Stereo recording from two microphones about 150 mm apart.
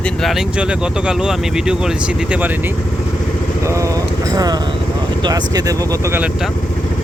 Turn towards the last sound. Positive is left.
turn(degrees=-20)  # may be behind; listen again after turning